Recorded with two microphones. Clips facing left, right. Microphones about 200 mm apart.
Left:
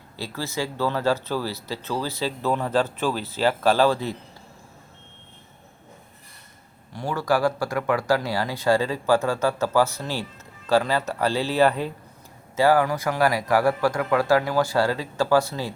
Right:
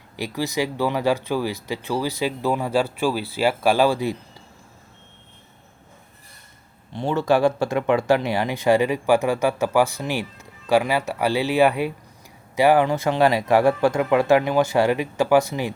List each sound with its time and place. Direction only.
0.2 s speech: 15° right (ahead or behind)
6.9 s speech: 25° right (ahead or behind)